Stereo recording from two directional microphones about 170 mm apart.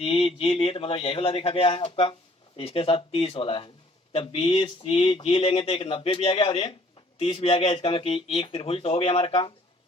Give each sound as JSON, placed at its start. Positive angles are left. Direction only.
{"t": 0.0, "sound": "speech", "side_deg": 35}